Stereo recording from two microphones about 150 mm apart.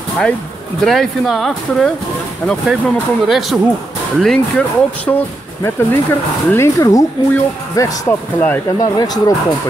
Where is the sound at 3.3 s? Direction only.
Centre (ahead or behind).